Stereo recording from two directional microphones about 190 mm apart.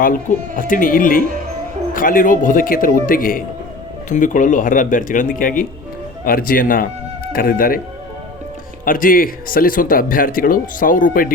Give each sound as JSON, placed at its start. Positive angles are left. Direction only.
{"t": 0.0, "sound": "speech", "side_deg": 45}
{"t": 8.8, "sound": "speech", "side_deg": 45}